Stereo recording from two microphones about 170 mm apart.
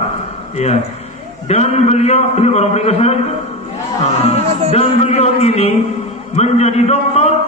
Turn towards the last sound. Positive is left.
turn(degrees=40)  # may be behind; listen again after turning